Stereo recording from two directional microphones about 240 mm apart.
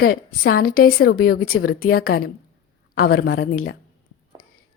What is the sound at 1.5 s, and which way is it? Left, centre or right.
Speech, left.